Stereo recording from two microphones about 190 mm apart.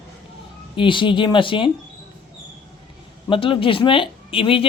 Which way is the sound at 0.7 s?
25° left (ahead or behind).